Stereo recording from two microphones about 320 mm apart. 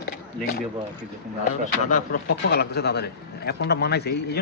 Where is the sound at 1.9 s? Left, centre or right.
Left.